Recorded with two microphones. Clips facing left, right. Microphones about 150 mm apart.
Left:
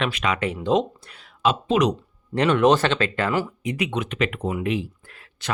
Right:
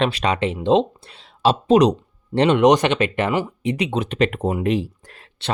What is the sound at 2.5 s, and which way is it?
Speech, 15° right (ahead or behind).